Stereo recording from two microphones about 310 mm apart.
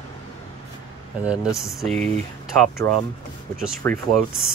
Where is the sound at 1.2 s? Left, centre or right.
Centre.